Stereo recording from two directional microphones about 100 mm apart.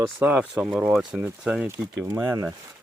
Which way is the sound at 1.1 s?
15° right (ahead or behind).